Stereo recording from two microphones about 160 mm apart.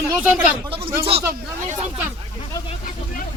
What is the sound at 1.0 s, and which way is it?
Speech, 35° right (ahead or behind).